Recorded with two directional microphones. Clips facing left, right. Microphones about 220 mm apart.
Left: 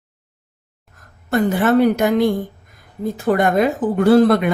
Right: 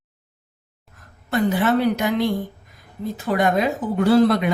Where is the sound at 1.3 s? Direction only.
45° left (ahead or behind).